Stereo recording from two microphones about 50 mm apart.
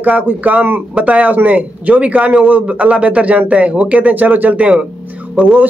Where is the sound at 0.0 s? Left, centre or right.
Right.